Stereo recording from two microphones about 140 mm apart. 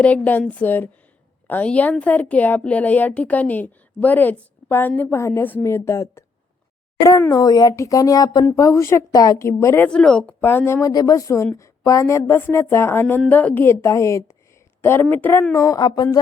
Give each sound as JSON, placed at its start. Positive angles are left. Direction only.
{"t": 0.0, "sound": "a woman's voice", "side_deg": 10}